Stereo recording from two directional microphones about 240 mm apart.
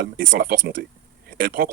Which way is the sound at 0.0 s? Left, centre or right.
Right.